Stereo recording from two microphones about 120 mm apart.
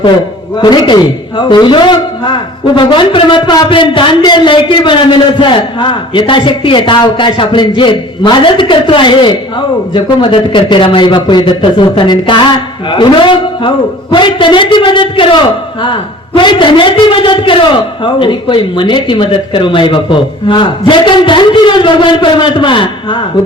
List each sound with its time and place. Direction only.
0.6 s a man's voice: 40° left (ahead or behind)